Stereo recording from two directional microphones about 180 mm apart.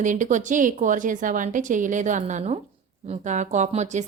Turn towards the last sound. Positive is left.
turn(degrees=-40)  # may be behind; listen again after turning